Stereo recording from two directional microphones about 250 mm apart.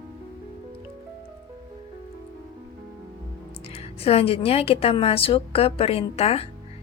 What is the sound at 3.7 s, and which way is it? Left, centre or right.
A woman's voice, left.